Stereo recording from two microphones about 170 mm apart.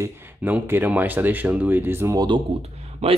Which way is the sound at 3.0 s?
40° right (ahead or behind).